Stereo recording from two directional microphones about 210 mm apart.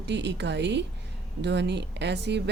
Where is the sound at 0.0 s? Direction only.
55° right (ahead or behind).